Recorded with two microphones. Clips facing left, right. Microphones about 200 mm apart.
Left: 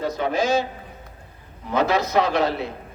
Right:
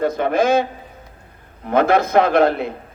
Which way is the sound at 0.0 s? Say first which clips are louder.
Right 5 dB; 55° right (ahead or behind).